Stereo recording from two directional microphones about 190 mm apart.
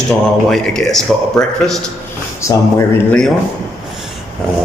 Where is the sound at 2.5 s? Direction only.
15° left (ahead or behind).